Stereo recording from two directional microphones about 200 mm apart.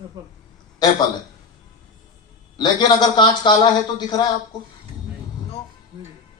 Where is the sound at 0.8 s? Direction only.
20° left (ahead or behind).